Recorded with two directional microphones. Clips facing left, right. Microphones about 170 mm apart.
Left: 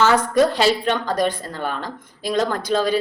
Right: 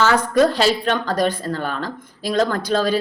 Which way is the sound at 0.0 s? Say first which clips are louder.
Even; 20° left (ahead or behind).